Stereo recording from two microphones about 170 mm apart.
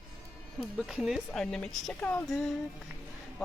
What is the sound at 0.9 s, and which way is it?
Speech, centre (ahead or behind).